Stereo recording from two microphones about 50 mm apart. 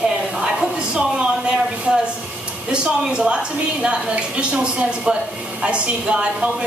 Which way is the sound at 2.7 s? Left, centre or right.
Centre.